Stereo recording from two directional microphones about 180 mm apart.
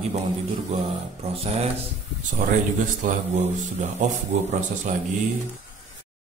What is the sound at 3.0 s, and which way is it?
Speech, 40° right (ahead or behind).